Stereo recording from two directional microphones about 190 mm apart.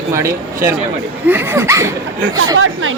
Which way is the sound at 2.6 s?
90° right.